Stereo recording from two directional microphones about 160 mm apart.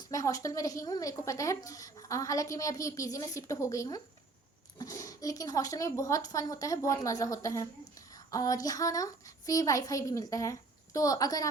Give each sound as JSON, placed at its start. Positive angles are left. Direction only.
{"t": 0.1, "sound": "a woman's voice", "side_deg": 20}